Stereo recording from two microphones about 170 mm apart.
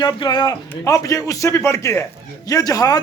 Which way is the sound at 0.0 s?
25° left (ahead or behind).